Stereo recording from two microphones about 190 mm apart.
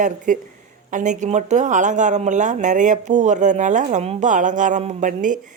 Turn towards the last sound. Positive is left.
turn(degrees=-45)  # may be behind; listen again after turning